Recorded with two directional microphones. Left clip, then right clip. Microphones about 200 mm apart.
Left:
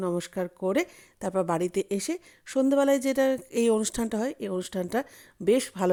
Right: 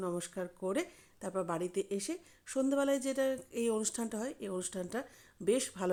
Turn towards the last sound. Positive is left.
turn(degrees=40)  # may be behind; listen again after turning